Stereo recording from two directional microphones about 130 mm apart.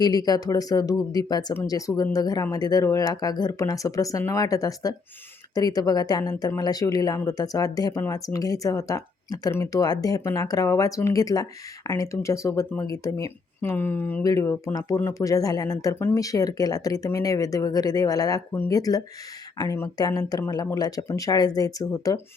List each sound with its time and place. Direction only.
0.0 s a woman's voice: 30° left (ahead or behind)